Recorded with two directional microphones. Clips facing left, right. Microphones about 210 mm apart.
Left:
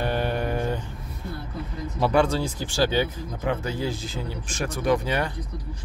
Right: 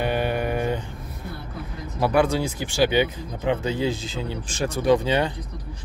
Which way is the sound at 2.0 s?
10° right (ahead or behind).